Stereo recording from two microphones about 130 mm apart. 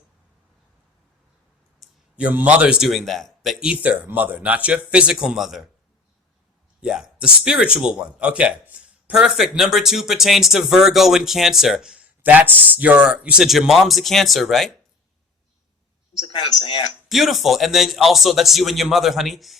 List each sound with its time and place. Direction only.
2.1 s a man's voice: 10° right (ahead or behind)
6.8 s speech: 5° right (ahead or behind)
16.2 s speech: 40° left (ahead or behind)
17.1 s speech: centre (ahead or behind)